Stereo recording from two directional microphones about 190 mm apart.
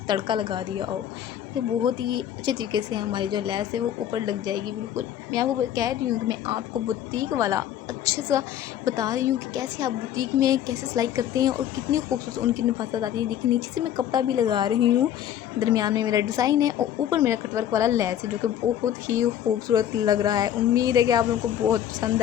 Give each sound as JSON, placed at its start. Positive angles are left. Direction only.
{"t": 0.1, "sound": "a woman's voice", "side_deg": -25}